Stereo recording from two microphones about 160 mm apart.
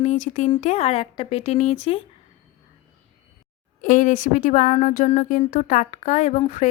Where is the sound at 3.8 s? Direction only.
55° left (ahead or behind).